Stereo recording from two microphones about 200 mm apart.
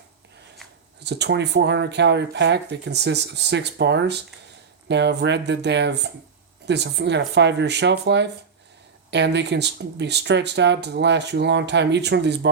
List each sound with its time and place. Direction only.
1.0 s speech: 55° right (ahead or behind)